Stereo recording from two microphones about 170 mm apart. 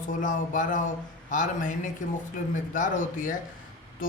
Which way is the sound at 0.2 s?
50° left (ahead or behind).